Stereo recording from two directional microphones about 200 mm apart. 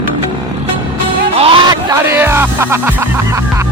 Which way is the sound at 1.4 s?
25° right (ahead or behind).